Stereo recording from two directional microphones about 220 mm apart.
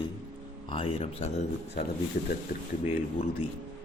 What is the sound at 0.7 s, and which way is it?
Speech, 25° left (ahead or behind).